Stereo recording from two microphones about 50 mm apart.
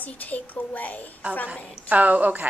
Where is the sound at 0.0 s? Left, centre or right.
Left.